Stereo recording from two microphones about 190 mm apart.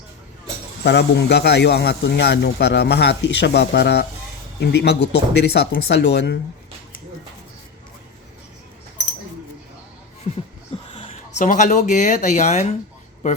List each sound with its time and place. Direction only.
0.9 s speech: 65° left (ahead or behind)
10.9 s speech: 30° left (ahead or behind)